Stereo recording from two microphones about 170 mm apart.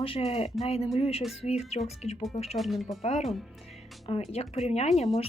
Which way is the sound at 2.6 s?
Centre (ahead or behind).